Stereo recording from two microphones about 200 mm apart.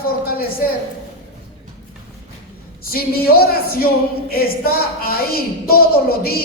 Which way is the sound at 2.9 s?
50° left (ahead or behind).